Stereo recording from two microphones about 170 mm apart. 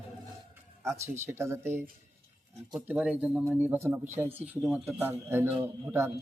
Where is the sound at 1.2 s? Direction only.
15° right (ahead or behind).